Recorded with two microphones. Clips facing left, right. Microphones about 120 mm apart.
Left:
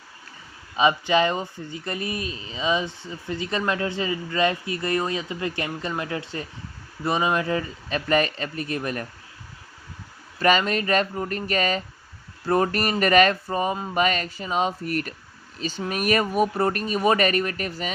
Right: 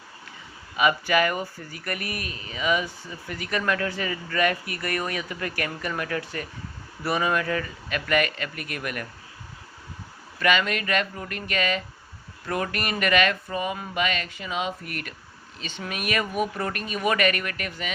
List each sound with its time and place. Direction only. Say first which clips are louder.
0.8 s speech: left 2 dB; 25° left (ahead or behind)
10.4 s speech: left 3 dB; 35° left (ahead or behind)